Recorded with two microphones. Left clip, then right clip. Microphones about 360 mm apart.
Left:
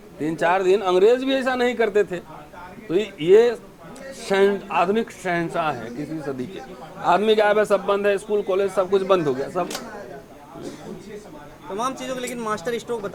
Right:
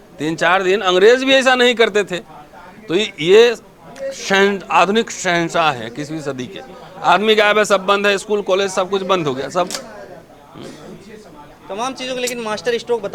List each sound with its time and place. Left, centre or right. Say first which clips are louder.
0.2 s a man's voice: right 5 dB; right
7.0 s a man's voice: right 5 dB; right
11.8 s a man's voice: right 5 dB; right